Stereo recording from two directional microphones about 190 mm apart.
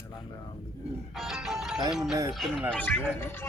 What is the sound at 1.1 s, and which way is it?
Speech, centre (ahead or behind).